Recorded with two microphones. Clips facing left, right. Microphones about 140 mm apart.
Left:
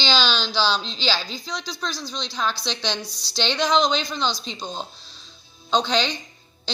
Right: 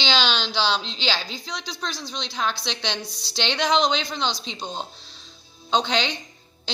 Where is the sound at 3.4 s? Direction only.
65° right (ahead or behind).